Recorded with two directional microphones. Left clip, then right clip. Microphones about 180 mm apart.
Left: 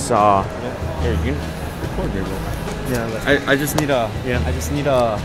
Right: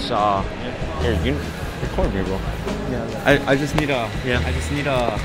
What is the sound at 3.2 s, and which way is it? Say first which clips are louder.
Speech: even; 50° right (ahead or behind).